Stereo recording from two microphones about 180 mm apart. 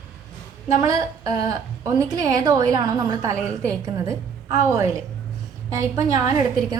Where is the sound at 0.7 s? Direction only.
20° right (ahead or behind).